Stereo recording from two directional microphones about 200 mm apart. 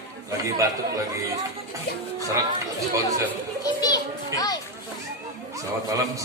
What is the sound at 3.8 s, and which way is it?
Children playing, 20° left (ahead or behind).